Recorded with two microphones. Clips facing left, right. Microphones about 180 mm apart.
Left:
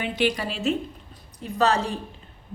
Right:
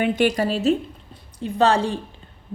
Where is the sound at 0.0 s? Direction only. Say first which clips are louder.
Right 6 dB; 45° right (ahead or behind).